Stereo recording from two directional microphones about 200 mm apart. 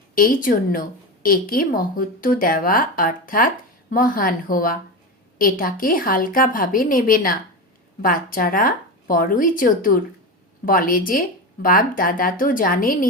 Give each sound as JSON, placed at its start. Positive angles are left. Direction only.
{"t": 0.1, "sound": "a woman's voice", "side_deg": 45}